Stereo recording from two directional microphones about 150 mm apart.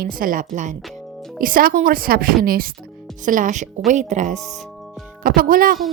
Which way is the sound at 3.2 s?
60° right (ahead or behind).